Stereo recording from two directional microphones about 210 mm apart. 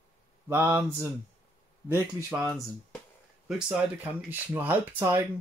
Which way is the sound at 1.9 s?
5° right (ahead or behind).